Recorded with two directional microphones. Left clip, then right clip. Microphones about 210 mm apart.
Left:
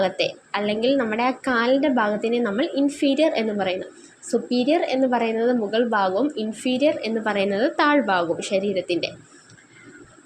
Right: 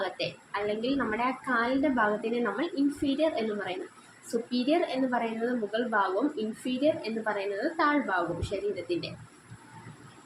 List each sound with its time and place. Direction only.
0.0 s a woman's voice: 30° left (ahead or behind)